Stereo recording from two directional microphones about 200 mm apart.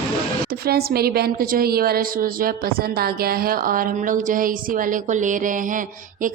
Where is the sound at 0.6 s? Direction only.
50° right (ahead or behind).